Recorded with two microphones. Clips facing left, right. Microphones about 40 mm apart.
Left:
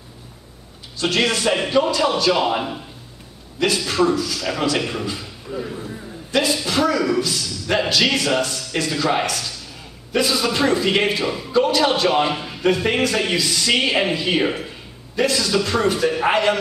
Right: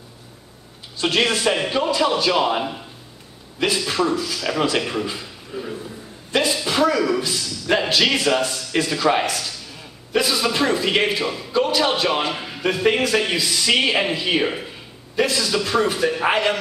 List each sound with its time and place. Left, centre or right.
0.9 s a man's voice: centre
3.5 s a man's voice: centre
4.4 s a man's voice: centre